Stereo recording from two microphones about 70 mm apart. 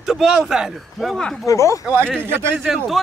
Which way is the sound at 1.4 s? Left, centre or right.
Left.